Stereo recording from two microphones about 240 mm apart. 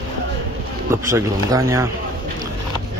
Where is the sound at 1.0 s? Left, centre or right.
Centre.